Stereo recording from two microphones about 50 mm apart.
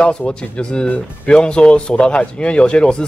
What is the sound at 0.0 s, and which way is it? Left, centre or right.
Speech, left.